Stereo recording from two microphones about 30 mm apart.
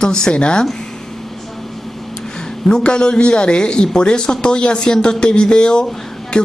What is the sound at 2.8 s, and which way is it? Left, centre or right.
A man's voice, left.